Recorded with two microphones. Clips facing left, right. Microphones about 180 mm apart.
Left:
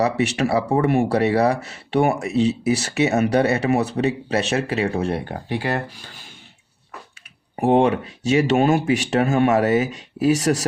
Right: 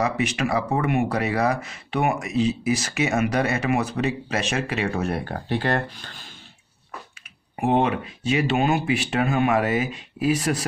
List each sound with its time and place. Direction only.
0.0 s speech: 35° left (ahead or behind); by 6.2 s 10° left (ahead or behind)
7.5 s speech: 40° left (ahead or behind)